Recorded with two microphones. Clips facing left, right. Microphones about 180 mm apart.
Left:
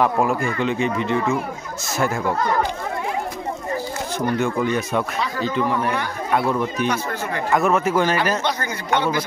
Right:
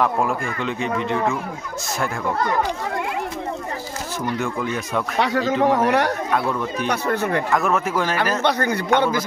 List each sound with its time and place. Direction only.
0.0 s speech: centre (ahead or behind)
4.4 s speech: centre (ahead or behind)
5.2 s a man's voice: 85° right
6.9 s a man's voice: 55° right (ahead or behind)
7.5 s speech: centre (ahead or behind)
8.4 s a man's voice: 60° right (ahead or behind)